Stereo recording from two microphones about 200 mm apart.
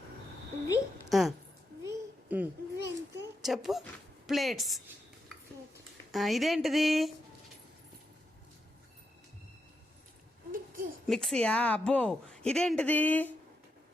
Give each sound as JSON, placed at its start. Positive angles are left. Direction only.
{"t": 1.1, "sound": "a woman's voice", "side_deg": 0}
{"t": 1.8, "sound": "a sound", "side_deg": -10}
{"t": 3.4, "sound": "a woman's voice", "side_deg": 0}
{"t": 6.1, "sound": "a woman's voice", "side_deg": 0}
{"t": 10.5, "sound": "a sound", "side_deg": -45}
{"t": 11.0, "sound": "a woman's voice", "side_deg": 0}